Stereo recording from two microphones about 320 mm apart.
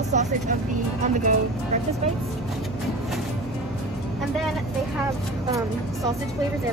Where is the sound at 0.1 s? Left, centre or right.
Right.